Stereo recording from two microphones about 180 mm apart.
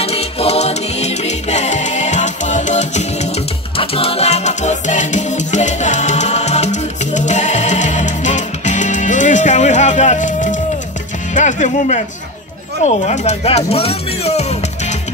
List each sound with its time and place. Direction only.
0.0 s music: 35° left (ahead or behind)
11.3 s speech: 45° left (ahead or behind)